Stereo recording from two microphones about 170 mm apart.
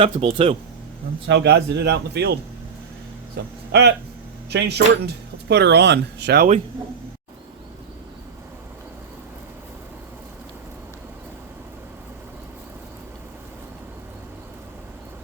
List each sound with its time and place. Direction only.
0.0 s speech: 35° right (ahead or behind)
1.3 s speech: 80° right
3.3 s speech: 90° right